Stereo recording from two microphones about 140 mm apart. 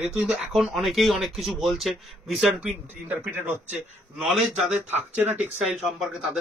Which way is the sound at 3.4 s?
15° right (ahead or behind).